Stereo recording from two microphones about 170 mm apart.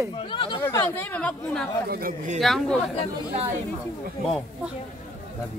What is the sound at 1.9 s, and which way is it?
Speech, 60° right (ahead or behind).